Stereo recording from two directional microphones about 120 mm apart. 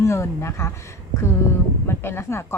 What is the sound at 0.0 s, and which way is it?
Speech, 25° left (ahead or behind).